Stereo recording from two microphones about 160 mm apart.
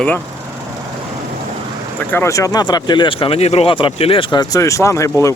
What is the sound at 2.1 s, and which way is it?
Speech, 20° left (ahead or behind).